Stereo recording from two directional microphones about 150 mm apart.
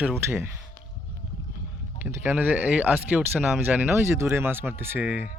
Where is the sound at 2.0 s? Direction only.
15° right (ahead or behind).